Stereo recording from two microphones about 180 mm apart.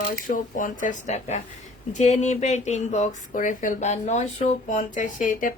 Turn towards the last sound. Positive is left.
turn(degrees=45)  # may be behind; listen again after turning